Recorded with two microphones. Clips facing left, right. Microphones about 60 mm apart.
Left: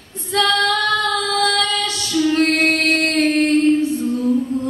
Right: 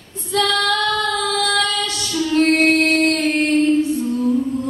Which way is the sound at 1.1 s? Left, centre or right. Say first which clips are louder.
Left 1 dB; right.